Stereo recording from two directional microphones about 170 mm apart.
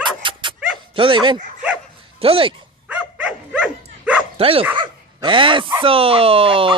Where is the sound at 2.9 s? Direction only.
5° right (ahead or behind).